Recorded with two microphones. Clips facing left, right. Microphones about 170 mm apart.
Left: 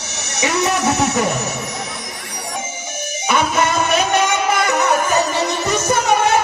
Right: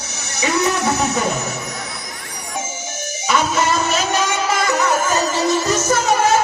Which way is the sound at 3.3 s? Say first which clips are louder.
Left 1 dB; 55° left (ahead or behind).